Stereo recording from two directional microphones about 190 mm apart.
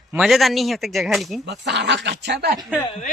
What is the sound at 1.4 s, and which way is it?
Speech, 65° right (ahead or behind).